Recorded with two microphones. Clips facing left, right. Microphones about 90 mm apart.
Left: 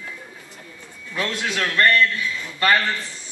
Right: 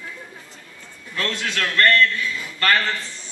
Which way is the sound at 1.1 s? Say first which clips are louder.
Left 1 dB; 15° left (ahead or behind).